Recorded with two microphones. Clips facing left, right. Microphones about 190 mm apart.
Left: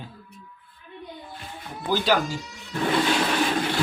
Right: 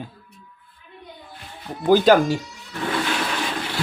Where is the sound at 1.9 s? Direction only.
45° right (ahead or behind).